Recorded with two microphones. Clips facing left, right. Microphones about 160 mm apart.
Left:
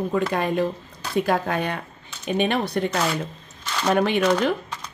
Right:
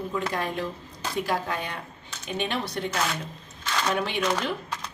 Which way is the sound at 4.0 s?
55° left (ahead or behind).